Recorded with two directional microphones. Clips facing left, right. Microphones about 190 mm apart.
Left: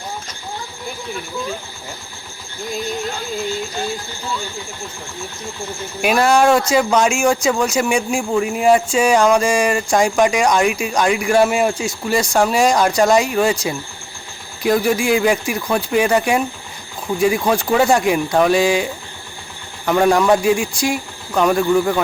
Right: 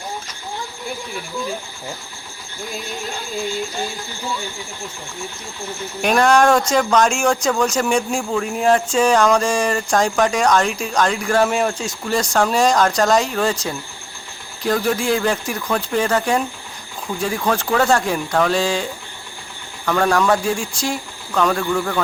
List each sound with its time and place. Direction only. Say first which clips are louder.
6.0 s speech: even; 5° left (ahead or behind)